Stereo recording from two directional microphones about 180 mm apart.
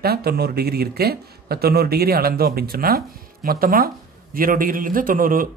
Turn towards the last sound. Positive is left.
turn(degrees=-50)  # may be behind; listen again after turning